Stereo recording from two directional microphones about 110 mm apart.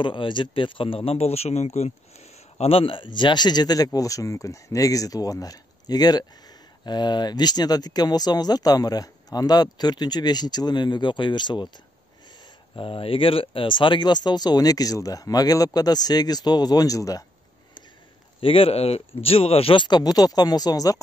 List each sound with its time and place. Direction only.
0.0 s speech: 50° left (ahead or behind)
12.7 s speech: 55° left (ahead or behind); by 17.2 s 30° left (ahead or behind)
18.4 s speech: 55° left (ahead or behind); by 21.0 s 35° left (ahead or behind)